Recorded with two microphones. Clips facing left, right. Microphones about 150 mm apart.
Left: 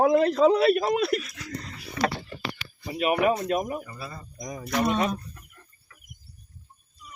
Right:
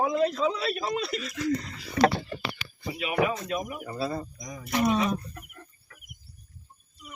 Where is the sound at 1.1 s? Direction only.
90° right.